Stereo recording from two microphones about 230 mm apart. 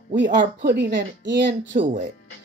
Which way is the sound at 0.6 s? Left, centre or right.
Right.